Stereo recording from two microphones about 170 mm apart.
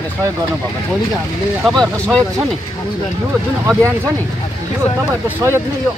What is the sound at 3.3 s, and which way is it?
Speech, 15° right (ahead or behind).